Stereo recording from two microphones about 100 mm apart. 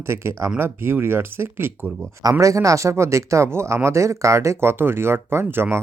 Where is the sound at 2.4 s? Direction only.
35° right (ahead or behind).